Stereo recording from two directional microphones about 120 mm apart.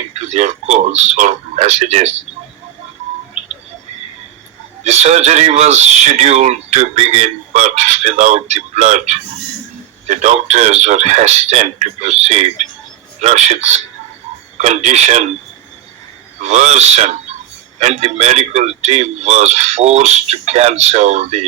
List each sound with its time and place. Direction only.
0.1 s speech: 70° right (ahead or behind)
4.8 s speech: 70° right (ahead or behind)
16.4 s speech: 70° right (ahead or behind)